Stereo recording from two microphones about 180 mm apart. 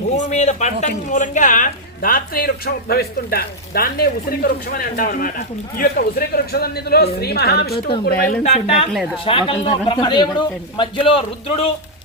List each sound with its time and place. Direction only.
0.2 s speech: 40° left (ahead or behind); by 8.2 s 60° left (ahead or behind)
8.4 s a man's voice: 35° left (ahead or behind)